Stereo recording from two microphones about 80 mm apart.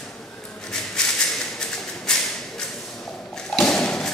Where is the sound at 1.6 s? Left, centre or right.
Centre.